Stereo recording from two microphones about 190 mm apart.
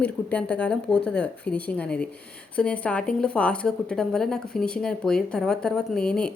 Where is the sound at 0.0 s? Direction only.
5° left (ahead or behind).